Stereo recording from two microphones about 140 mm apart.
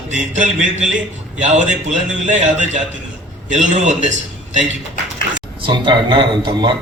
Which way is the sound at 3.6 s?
60° right (ahead or behind).